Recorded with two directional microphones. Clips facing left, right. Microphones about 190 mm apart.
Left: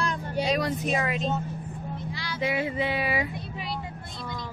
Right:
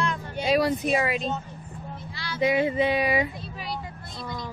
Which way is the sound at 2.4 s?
20° right (ahead or behind).